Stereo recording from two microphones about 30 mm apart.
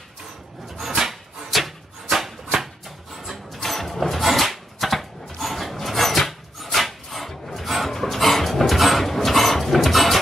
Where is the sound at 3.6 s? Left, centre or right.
Centre.